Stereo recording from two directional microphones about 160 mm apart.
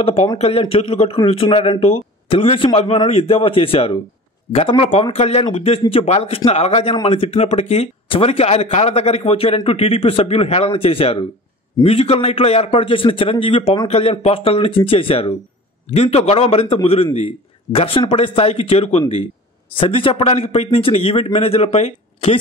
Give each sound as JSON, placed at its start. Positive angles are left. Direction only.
{"t": 0.0, "sound": "a man's voice", "side_deg": 40}